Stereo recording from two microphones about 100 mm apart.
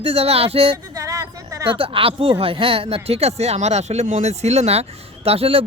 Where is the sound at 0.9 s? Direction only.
35° right (ahead or behind).